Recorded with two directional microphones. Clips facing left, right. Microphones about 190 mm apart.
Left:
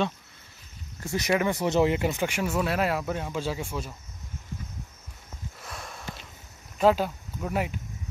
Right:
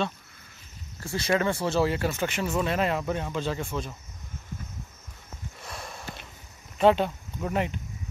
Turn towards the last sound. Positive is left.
turn(degrees=5)  # may be behind; listen again after turning